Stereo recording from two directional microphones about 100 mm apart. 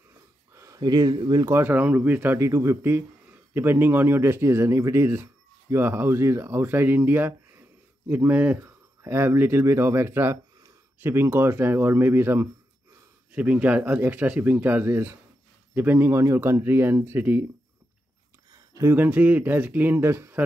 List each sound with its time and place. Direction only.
0.7 s speech: 40° right (ahead or behind)
1.4 s speech: 25° right (ahead or behind)
18.5 s a sound: 30° right (ahead or behind)
19.0 s speech: 15° right (ahead or behind)